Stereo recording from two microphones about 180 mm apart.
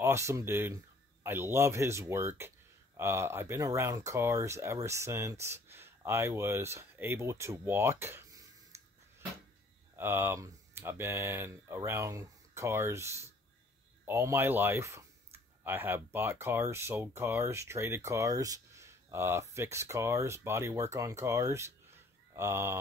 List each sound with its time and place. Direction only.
0.0 s speech: 15° right (ahead or behind)
8.7 s a sound: 15° right (ahead or behind)
9.9 s speech: 10° right (ahead or behind)